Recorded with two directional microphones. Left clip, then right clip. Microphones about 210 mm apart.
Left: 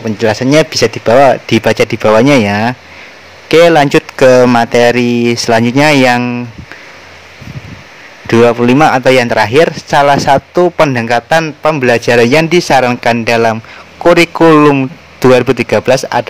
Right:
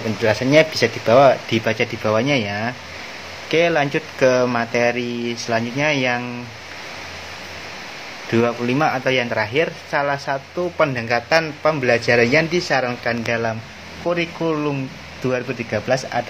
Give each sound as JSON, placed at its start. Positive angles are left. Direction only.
{"t": 0.2, "sound": "a man's voice", "side_deg": 50}
{"t": 8.3, "sound": "a man's voice", "side_deg": 50}